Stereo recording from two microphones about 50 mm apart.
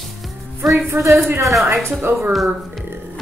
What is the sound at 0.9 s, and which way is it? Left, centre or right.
Speech, right.